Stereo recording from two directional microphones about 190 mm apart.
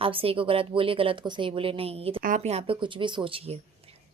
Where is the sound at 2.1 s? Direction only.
45° right (ahead or behind); by 3.6 s 30° right (ahead or behind).